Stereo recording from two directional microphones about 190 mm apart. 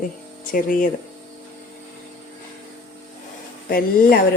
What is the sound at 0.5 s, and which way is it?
Speech, 45° left (ahead or behind).